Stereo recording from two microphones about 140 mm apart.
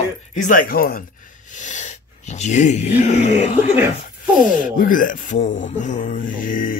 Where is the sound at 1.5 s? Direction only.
60° left (ahead or behind).